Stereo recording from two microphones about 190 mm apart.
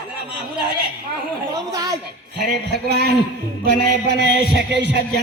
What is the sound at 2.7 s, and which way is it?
A man's voice, 60° right (ahead or behind).